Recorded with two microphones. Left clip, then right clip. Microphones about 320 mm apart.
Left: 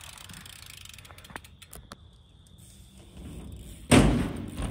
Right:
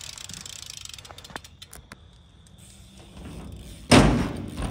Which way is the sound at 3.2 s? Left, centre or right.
Centre.